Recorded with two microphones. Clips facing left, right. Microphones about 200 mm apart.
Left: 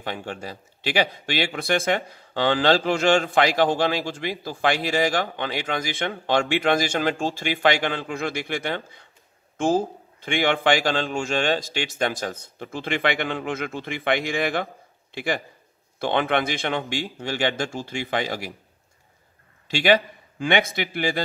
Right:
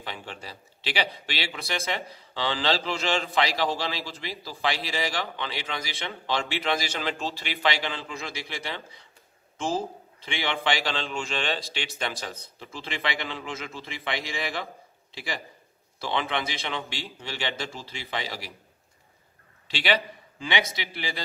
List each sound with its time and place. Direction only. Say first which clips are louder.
0.0 s speech: left 7 dB; 50° left (ahead or behind)
19.7 s speech: left 7 dB; 45° left (ahead or behind)